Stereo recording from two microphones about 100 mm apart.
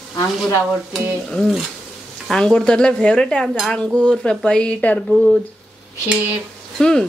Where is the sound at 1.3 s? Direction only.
Centre (ahead or behind).